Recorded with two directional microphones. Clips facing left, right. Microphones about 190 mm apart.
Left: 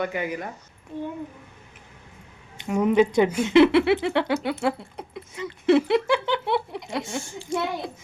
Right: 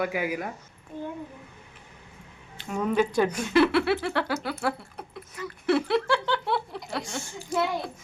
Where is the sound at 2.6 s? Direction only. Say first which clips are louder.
Left 6 dB; 20° left (ahead or behind).